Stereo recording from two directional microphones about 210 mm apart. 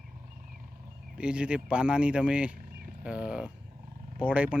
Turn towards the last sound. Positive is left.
turn(degrees=-5)  # may be behind; listen again after turning